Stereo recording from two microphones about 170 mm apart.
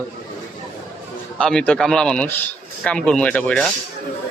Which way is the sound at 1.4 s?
5° left (ahead or behind).